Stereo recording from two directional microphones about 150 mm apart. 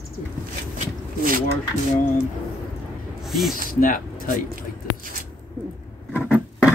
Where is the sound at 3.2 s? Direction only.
Centre (ahead or behind).